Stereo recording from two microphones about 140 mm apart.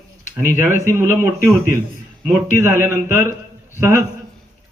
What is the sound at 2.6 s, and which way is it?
A man's voice, 20° right (ahead or behind).